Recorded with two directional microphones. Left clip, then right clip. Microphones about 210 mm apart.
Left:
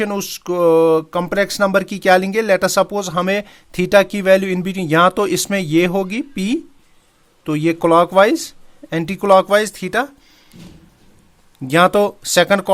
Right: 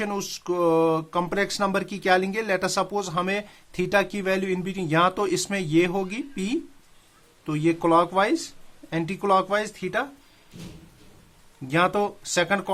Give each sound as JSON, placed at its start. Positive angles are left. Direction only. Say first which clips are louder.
{"t": 0.0, "sound": "speech", "louder": "left 8 dB", "side_deg": 40}
{"t": 11.7, "sound": "speech", "louder": "left 10 dB", "side_deg": 45}